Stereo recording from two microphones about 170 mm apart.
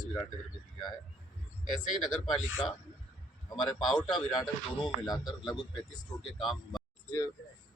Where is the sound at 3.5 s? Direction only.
Centre (ahead or behind).